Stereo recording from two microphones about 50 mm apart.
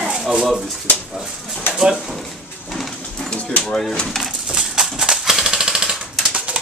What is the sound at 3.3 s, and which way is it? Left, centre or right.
Bird, left.